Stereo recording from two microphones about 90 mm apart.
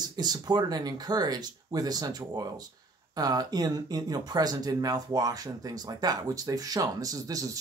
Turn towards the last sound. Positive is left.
turn(degrees=-40)  # may be behind; listen again after turning